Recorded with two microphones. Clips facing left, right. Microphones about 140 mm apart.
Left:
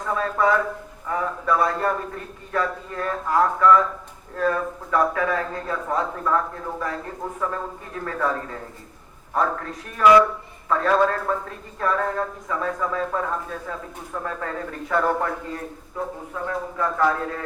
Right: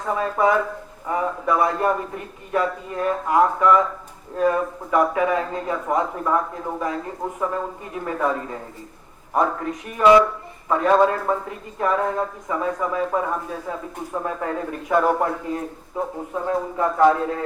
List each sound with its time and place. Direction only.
0.0 s a man's voice: 20° right (ahead or behind)